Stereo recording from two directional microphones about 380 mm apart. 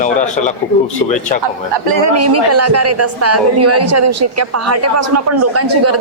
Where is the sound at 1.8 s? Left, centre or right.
Right.